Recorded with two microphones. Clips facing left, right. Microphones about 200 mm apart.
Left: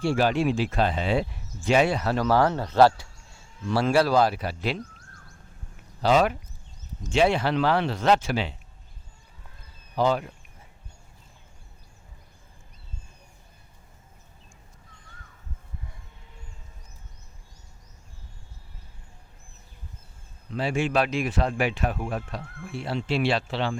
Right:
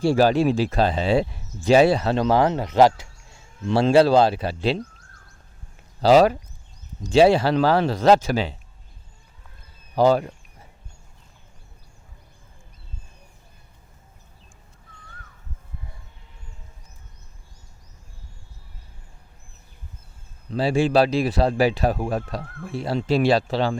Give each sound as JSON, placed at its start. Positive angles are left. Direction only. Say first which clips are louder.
{"t": 0.0, "sound": "speech", "louder": "right 5 dB", "side_deg": -35}
{"t": 6.0, "sound": "speech", "louder": "right 6 dB", "side_deg": -35}
{"t": 9.9, "sound": "speech", "louder": "right 6 dB", "side_deg": -40}
{"t": 20.5, "sound": "speech", "louder": "right 6 dB", "side_deg": -35}